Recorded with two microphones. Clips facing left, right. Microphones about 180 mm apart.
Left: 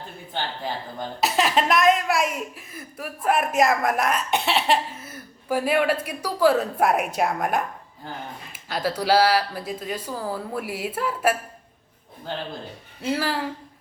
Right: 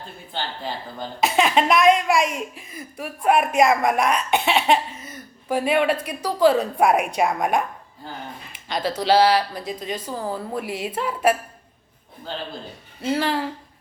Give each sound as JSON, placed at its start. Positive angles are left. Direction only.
{"t": 1.2, "sound": "a woman's voice", "side_deg": 0}
{"t": 13.0, "sound": "speech", "side_deg": 5}